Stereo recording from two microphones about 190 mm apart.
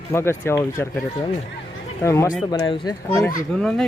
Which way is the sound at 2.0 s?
15° left (ahead or behind).